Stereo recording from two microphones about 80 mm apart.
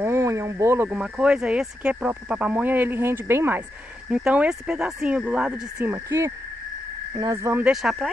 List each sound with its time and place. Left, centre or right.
0.0 s a sound: right
0.8 s speech: centre; by 3.6 s right
4.1 s speech: centre
6.0 s speech: right
7.6 s speech: centre